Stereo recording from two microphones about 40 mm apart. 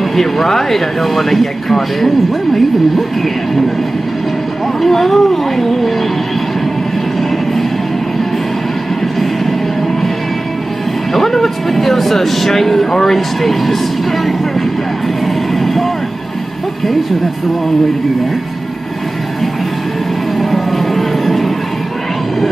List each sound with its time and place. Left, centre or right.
0.1 s speech: centre
4.8 s speech: centre
11.1 s speech: centre
15.6 s vehicle: centre
20.3 s music: centre